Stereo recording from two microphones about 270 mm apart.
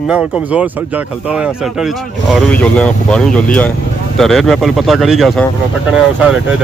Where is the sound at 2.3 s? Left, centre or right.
Centre.